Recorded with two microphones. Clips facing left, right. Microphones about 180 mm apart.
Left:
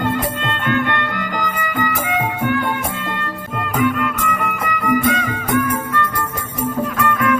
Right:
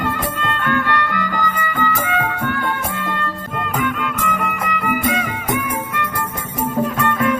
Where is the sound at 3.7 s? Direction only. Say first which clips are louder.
Left 5 dB; centre (ahead or behind).